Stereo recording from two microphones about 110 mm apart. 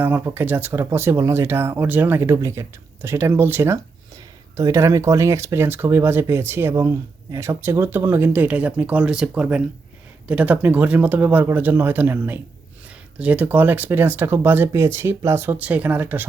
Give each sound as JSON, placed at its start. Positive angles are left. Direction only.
{"t": 0.0, "sound": "speech", "side_deg": -15}